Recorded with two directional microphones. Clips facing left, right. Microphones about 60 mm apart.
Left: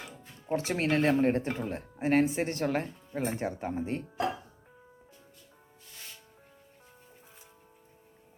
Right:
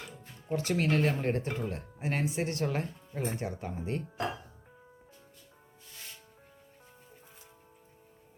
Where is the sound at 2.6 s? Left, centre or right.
Left.